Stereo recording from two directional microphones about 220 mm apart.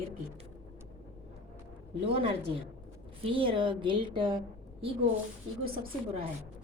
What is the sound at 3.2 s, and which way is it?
A woman's voice, 25° right (ahead or behind).